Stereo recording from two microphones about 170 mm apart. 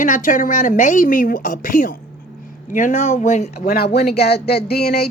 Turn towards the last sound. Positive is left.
turn(degrees=65)  # may be behind; listen again after turning